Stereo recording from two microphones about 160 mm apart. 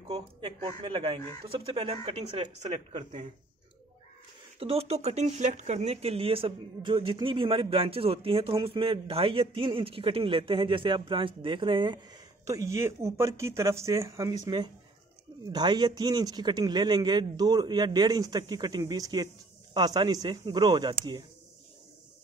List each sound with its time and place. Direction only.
0.1 s speech: 30° right (ahead or behind)
2.7 s speech: 50° right (ahead or behind)
4.6 s a man's voice: 40° right (ahead or behind)